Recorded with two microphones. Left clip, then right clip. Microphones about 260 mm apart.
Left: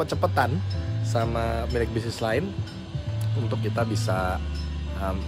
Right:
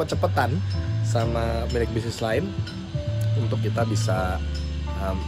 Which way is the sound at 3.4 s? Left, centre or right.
Centre.